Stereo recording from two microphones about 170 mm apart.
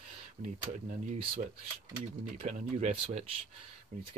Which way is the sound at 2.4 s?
45° right (ahead or behind).